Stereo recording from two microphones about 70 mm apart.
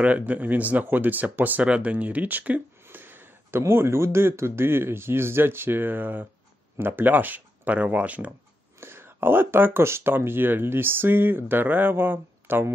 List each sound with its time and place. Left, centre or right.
0.0 s speech: right
8.7 s speech: right